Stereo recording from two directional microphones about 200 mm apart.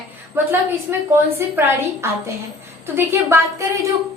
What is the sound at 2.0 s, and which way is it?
A woman's voice, 15° right (ahead or behind).